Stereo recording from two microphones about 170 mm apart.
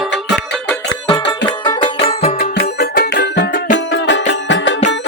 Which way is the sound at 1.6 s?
30° left (ahead or behind).